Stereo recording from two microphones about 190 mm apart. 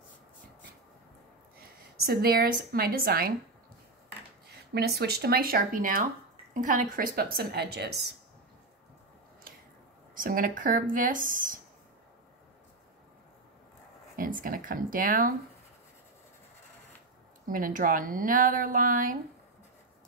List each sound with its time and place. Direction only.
1.6 s a woman's voice: 50° right (ahead or behind)
4.7 s a woman's voice: 55° right (ahead or behind)
10.1 s a woman's voice: 45° right (ahead or behind)
14.1 s a woman's voice: 45° right (ahead or behind)
17.5 s a woman's voice: 45° right (ahead or behind)